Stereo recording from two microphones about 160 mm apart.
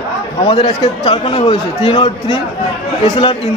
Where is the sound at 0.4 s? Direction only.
40° left (ahead or behind).